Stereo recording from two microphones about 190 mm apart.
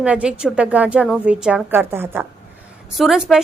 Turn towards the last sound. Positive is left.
turn(degrees=0)  # may be behind; listen again after turning